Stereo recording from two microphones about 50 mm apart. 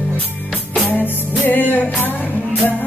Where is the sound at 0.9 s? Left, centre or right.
Left.